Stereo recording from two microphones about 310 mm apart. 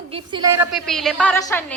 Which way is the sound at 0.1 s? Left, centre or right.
Centre.